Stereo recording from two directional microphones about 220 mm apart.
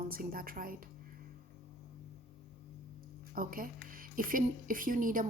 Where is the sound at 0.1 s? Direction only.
40° right (ahead or behind).